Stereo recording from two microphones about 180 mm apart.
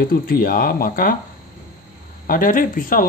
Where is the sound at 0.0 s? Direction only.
55° left (ahead or behind).